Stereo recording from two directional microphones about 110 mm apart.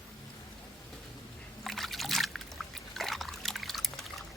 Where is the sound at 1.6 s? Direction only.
Centre (ahead or behind).